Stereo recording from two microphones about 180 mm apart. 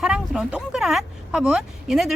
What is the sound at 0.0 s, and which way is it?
A woman's voice, 5° right (ahead or behind).